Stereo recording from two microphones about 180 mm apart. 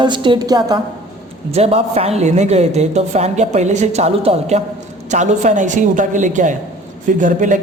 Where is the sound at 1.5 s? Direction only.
35° right (ahead or behind).